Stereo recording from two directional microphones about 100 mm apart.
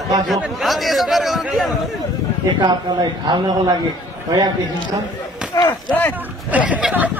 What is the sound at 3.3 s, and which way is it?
Speech, 40° right (ahead or behind).